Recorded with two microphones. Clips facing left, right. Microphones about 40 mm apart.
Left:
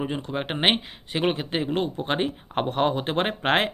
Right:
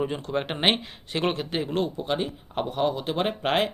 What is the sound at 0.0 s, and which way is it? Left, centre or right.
Speech, centre.